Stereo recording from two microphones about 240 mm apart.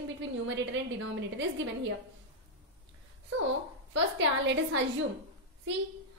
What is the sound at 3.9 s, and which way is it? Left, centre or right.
Speech, right.